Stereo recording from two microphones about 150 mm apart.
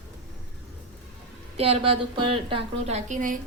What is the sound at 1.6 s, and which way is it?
A woman's voice, 40° right (ahead or behind).